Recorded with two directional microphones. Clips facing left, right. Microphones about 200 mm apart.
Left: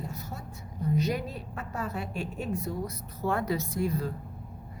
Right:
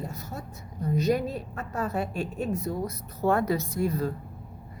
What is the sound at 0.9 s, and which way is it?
A woman's voice, 45° right (ahead or behind).